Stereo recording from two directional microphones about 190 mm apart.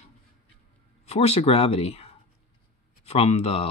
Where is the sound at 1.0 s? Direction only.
35° left (ahead or behind).